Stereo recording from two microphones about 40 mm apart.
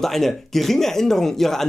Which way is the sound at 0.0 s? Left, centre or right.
Centre.